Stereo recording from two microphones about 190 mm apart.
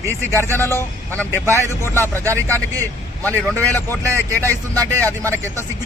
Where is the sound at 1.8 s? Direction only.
10° left (ahead or behind).